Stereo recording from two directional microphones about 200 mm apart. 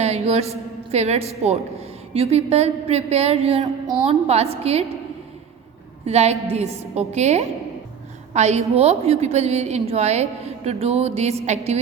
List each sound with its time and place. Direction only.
0.0 s a woman's voice: 30° right (ahead or behind)
6.1 s a woman's voice: 30° right (ahead or behind)